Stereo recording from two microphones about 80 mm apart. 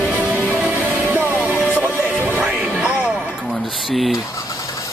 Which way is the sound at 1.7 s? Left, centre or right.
Centre.